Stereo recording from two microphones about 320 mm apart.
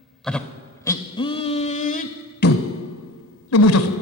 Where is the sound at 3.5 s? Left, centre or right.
Left.